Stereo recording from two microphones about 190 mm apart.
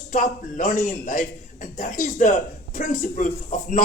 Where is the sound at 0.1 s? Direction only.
40° left (ahead or behind).